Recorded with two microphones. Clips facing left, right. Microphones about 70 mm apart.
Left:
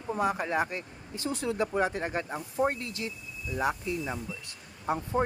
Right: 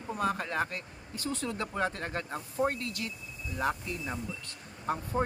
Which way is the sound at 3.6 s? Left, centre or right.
Centre.